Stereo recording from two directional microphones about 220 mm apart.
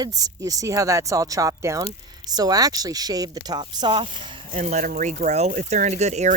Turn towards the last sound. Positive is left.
turn(degrees=-30)  # may be behind; listen again after turning